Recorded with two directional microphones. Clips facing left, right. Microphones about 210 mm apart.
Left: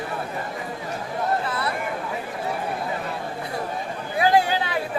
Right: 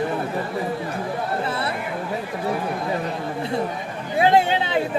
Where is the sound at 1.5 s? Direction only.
25° right (ahead or behind).